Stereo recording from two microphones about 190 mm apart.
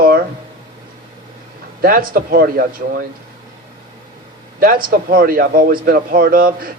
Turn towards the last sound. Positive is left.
turn(degrees=-50)  # may be behind; listen again after turning